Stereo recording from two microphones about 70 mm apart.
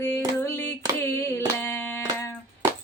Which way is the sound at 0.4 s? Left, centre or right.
Left.